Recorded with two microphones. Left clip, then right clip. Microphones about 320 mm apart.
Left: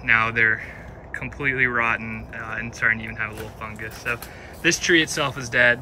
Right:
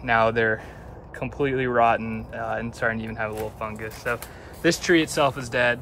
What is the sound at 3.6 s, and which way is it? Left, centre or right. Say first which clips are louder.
Speech: right 1 dB; centre.